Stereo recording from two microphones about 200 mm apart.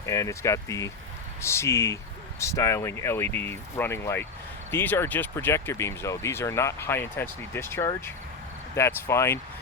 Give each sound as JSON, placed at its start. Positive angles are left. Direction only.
{"t": 0.0, "sound": "speech", "side_deg": 15}